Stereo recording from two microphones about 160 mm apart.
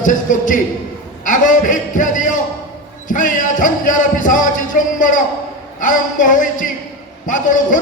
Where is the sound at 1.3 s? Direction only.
55° left (ahead or behind).